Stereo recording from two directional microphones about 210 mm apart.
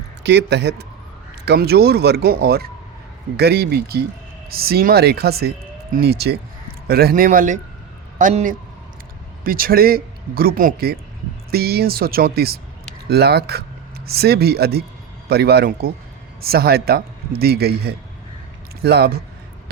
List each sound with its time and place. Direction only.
0.2 s a man's voice: 55° right (ahead or behind)